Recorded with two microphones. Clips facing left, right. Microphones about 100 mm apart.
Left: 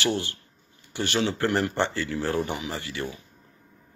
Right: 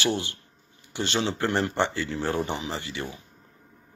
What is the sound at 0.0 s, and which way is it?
Speech, 20° right (ahead or behind).